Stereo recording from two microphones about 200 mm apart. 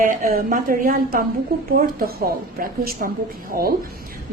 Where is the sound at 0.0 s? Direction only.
45° right (ahead or behind).